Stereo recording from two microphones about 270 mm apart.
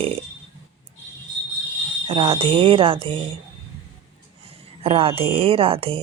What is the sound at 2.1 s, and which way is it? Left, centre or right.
A woman's voice, centre.